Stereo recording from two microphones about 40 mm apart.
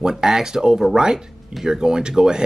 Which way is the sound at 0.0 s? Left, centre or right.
Centre.